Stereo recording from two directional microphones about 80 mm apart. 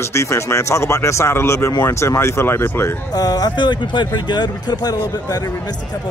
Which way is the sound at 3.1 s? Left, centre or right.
Left.